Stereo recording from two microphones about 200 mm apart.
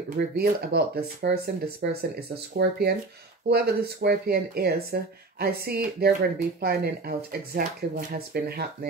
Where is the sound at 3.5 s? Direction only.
55° right (ahead or behind).